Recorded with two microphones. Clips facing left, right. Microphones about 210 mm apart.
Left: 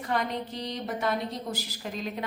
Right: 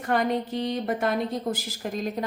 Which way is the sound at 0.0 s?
50° right (ahead or behind).